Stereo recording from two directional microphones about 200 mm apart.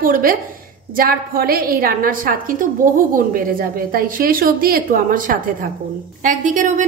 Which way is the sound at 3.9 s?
45° right (ahead or behind).